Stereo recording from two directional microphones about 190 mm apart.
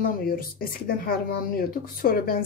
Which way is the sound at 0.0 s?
50° left (ahead or behind).